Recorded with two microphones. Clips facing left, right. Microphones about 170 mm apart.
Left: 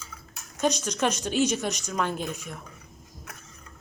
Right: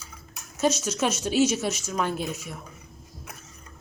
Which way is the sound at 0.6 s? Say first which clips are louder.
Right 1 dB; 5° right (ahead or behind).